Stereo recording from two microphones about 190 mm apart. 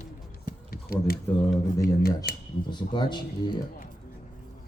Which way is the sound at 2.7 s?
25° left (ahead or behind).